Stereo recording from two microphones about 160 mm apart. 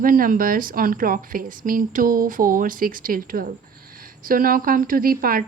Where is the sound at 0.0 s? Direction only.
60° right (ahead or behind).